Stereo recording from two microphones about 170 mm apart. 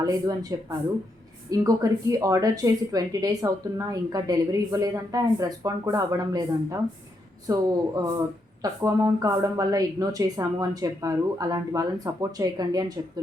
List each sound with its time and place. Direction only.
0.0 s a woman's voice: 20° right (ahead or behind)